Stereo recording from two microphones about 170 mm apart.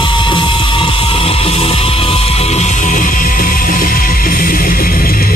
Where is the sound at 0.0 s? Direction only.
30° left (ahead or behind).